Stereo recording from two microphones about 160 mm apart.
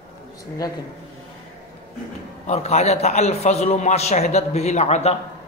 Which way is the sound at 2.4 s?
45° left (ahead or behind).